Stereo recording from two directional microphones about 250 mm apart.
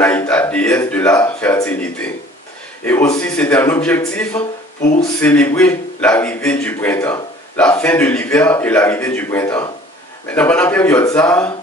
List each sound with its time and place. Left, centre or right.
0.0 s a man's voice: centre
4.4 s speech: left
5.2 s a man's voice: centre